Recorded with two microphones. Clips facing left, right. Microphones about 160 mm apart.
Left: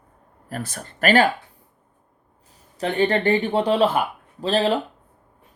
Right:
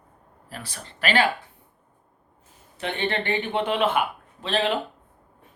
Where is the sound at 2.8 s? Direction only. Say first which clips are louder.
Left 7 dB; 40° left (ahead or behind).